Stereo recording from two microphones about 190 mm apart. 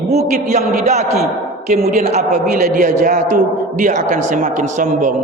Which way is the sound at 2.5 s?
45° right (ahead or behind).